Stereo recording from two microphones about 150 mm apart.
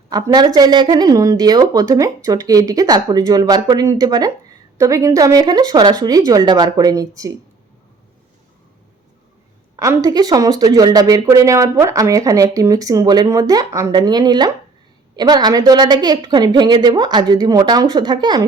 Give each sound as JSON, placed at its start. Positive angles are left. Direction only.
{"t": 0.1, "sound": "speech", "side_deg": -25}
{"t": 9.7, "sound": "speech", "side_deg": -20}